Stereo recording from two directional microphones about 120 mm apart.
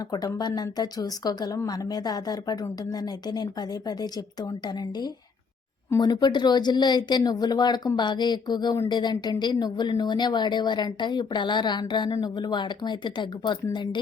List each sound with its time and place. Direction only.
0.3 s speech: 35° left (ahead or behind)